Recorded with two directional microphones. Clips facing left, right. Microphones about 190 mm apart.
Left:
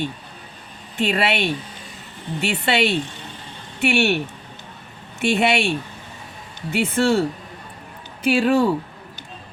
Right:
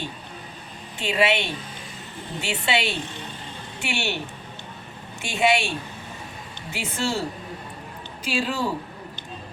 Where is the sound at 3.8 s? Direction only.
60° left (ahead or behind).